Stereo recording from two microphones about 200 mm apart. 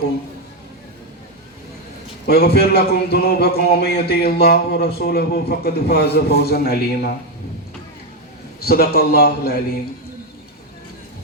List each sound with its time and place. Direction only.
2.2 s a man's voice: 50° left (ahead or behind)
8.6 s a man's voice: 50° left (ahead or behind)